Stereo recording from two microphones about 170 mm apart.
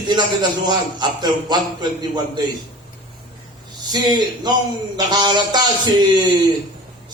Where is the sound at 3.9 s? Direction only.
25° right (ahead or behind).